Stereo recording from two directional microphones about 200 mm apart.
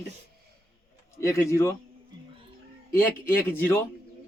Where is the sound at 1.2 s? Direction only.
15° left (ahead or behind).